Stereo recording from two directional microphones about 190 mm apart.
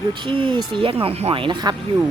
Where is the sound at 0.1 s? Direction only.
25° right (ahead or behind).